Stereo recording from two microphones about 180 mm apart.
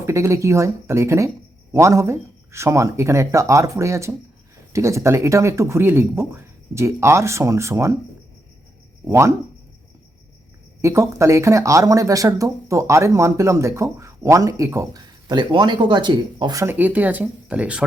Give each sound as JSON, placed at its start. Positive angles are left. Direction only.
{"t": 0.0, "sound": "speech", "side_deg": -15}
{"t": 9.0, "sound": "speech", "side_deg": -15}
{"t": 10.8, "sound": "speech", "side_deg": -15}